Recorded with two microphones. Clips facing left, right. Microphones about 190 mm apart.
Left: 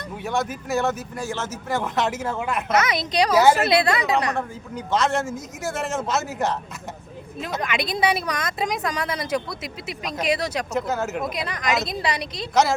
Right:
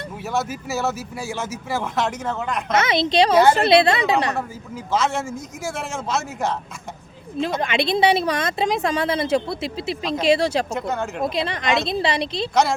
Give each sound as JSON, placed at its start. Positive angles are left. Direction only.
{"t": 0.3, "sound": "speech", "side_deg": -5}
{"t": 2.7, "sound": "a woman's voice", "side_deg": -25}
{"t": 3.3, "sound": "a woman's voice", "side_deg": 5}
{"t": 3.7, "sound": "a woman's voice", "side_deg": -25}
{"t": 4.4, "sound": "speech", "side_deg": 0}
{"t": 7.6, "sound": "a woman's voice", "side_deg": -25}
{"t": 10.7, "sound": "speech", "side_deg": 0}
{"t": 11.2, "sound": "a woman's voice", "side_deg": -30}